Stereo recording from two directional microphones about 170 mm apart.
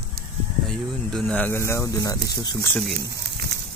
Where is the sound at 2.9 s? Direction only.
75° right (ahead or behind).